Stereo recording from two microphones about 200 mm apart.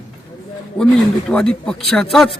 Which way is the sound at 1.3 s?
5° left (ahead or behind).